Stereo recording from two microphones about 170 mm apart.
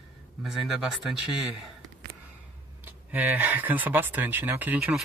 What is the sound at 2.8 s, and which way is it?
Speech, 10° right (ahead or behind).